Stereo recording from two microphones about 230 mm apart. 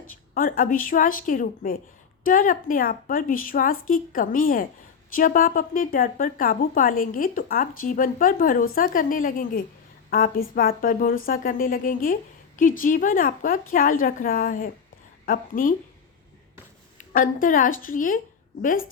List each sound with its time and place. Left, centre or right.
0.3 s speech: left
17.0 s speech: left